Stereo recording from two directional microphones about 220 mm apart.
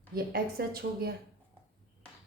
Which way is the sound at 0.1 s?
45° right (ahead or behind).